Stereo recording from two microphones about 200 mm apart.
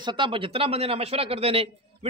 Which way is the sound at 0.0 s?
25° right (ahead or behind).